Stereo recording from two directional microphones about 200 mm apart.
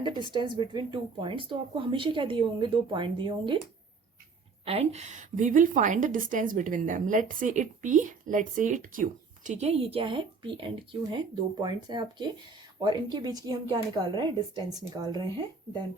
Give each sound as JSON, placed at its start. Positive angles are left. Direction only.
{"t": 0.0, "sound": "speech", "side_deg": -25}
{"t": 4.6, "sound": "a woman's voice", "side_deg": -30}